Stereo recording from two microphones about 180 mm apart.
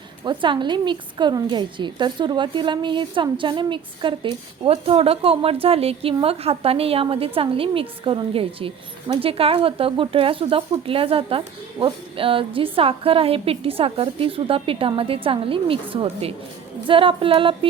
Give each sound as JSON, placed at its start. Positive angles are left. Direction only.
{"t": 0.3, "sound": "a woman's voice", "side_deg": -25}